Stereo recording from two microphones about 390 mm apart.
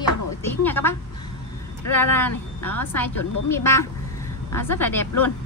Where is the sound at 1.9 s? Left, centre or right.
Centre.